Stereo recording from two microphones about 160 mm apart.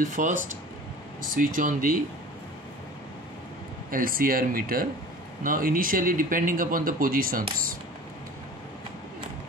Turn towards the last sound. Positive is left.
turn(degrees=-60)  # may be behind; listen again after turning